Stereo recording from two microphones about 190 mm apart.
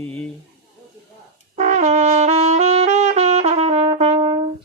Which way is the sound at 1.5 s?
40° right (ahead or behind).